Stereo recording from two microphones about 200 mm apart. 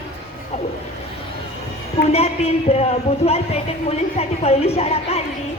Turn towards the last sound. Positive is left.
turn(degrees=30)  # may be behind; listen again after turning